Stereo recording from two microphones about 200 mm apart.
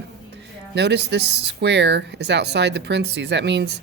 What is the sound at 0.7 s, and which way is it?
Speech, 60° right (ahead or behind).